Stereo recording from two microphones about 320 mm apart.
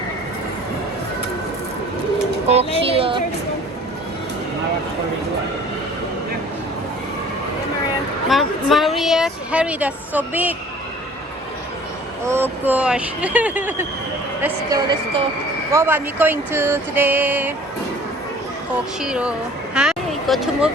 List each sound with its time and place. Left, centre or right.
2.5 s speech: centre
8.3 s a woman's voice: centre
12.2 s a woman's voice: centre
19.0 s a woman's voice: centre
19.7 s a sound: centre